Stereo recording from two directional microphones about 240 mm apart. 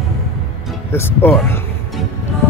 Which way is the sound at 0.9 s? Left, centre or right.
Centre.